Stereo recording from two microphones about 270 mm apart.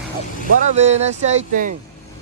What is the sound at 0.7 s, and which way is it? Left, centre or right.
Speech, right.